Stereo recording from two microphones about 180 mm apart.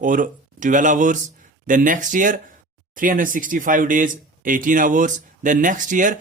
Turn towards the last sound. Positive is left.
turn(degrees=-45)  # may be behind; listen again after turning